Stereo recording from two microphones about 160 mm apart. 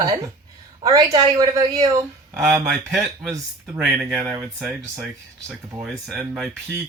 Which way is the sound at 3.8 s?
5° right (ahead or behind).